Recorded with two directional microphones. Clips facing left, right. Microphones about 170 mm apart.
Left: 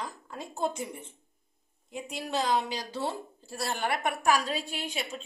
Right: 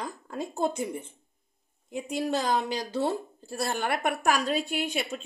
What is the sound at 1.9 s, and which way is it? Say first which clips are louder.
A woman's voice: right 6 dB; 45° right (ahead or behind).